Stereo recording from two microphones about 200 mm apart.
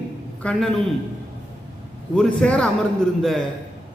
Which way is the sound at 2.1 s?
5° left (ahead or behind).